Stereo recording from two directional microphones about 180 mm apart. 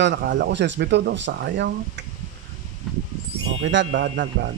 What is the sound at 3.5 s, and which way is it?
Speech, 90° right.